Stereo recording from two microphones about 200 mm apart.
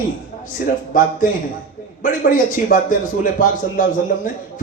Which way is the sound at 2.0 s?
40° left (ahead or behind).